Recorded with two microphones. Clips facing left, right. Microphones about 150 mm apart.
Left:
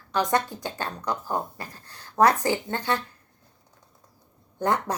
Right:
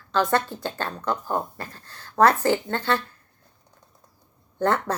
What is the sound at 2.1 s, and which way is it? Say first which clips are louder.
Speech: right 2 dB; 15° left (ahead or behind).